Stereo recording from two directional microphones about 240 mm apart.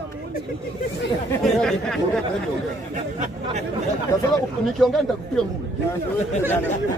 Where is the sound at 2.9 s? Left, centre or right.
Right.